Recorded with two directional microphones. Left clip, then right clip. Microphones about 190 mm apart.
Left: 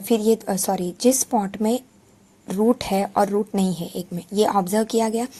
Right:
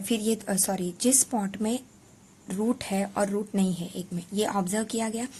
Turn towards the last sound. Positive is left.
turn(degrees=30)  # may be behind; listen again after turning